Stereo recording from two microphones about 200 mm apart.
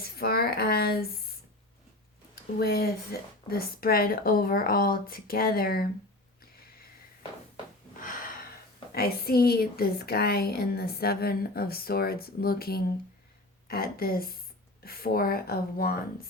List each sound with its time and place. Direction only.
0.0 s speech: 50° left (ahead or behind)
2.3 s a woman's voice: 50° left (ahead or behind)
8.9 s a woman's voice: 50° left (ahead or behind)